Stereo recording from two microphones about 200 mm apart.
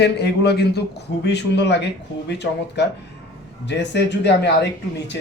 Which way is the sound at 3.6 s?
60° left (ahead or behind).